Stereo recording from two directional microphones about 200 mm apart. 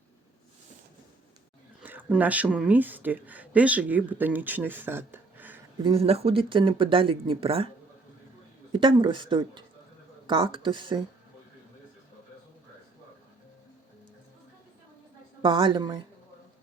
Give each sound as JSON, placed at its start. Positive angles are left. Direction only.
{"t": 1.8, "sound": "speech", "side_deg": -10}
{"t": 5.8, "sound": "speech", "side_deg": -30}
{"t": 8.7, "sound": "speech", "side_deg": -25}
{"t": 15.4, "sound": "speech", "side_deg": -25}